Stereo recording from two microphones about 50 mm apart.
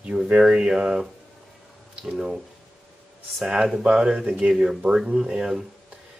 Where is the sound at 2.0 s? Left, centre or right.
Centre.